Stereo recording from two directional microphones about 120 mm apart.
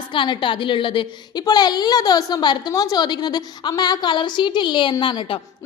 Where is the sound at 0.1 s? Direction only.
40° left (ahead or behind).